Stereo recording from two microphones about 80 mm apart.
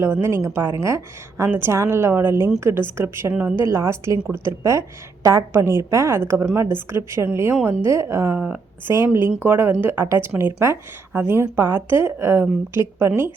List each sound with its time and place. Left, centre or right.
0.0 s a woman's voice: right
9.4 s speech: right